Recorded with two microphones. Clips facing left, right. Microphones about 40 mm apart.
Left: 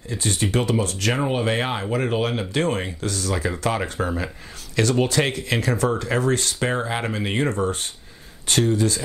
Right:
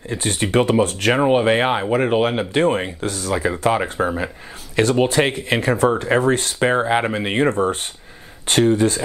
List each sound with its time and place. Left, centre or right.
0.1 s speech: right